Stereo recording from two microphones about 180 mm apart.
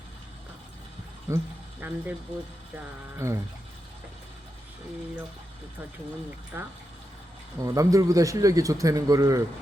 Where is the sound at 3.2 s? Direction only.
15° right (ahead or behind).